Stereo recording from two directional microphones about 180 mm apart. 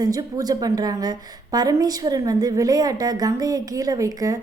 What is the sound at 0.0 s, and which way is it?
A woman's voice, 20° right (ahead or behind).